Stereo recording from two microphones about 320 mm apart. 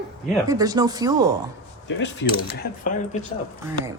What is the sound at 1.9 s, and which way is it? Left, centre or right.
Speech, left.